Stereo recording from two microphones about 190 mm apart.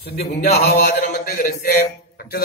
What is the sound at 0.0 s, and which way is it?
A man's voice, 55° left (ahead or behind).